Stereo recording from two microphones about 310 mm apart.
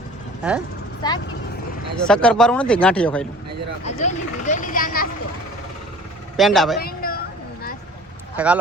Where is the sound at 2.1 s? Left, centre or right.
Centre.